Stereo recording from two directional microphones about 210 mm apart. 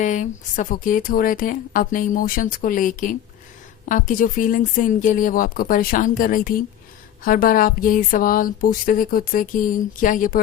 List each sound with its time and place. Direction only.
0.0 s speech: 35° left (ahead or behind)